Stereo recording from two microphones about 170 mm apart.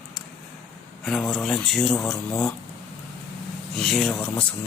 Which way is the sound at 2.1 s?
15° left (ahead or behind).